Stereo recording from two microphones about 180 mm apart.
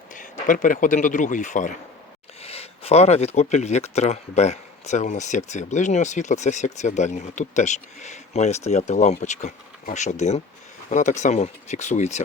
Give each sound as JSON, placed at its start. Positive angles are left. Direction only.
{"t": 0.1, "sound": "speech", "side_deg": 45}
{"t": 2.4, "sound": "speech", "side_deg": 35}